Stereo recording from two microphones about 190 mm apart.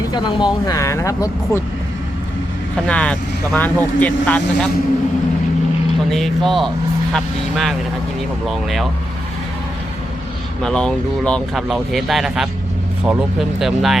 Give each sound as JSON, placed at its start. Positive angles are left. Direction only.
{"t": 0.1, "sound": "speech", "side_deg": 20}
{"t": 2.8, "sound": "speech", "side_deg": 5}
{"t": 6.1, "sound": "speech", "side_deg": 0}
{"t": 10.6, "sound": "speech", "side_deg": 5}